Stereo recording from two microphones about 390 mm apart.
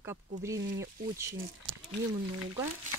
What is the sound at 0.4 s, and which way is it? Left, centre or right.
Speech, centre.